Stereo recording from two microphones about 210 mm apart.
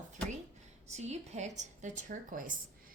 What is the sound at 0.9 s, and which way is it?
A woman's voice, 30° right (ahead or behind).